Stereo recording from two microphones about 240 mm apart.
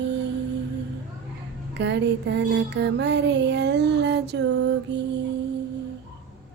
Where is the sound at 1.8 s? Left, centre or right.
Right.